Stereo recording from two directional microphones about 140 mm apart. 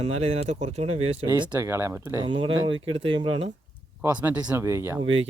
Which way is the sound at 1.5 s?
20° right (ahead or behind).